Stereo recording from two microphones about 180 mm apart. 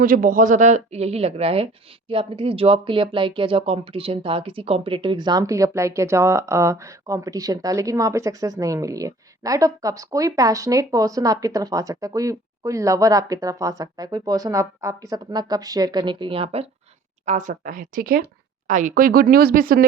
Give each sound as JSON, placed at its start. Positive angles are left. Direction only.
{"t": 0.0, "sound": "speech", "side_deg": -50}
{"t": 17.2, "sound": "speech", "side_deg": -45}